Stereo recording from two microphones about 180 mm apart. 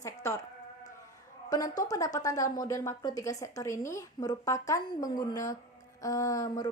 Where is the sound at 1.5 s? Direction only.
20° left (ahead or behind).